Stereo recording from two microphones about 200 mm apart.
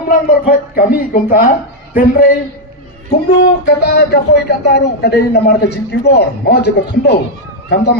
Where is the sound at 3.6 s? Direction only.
50° left (ahead or behind).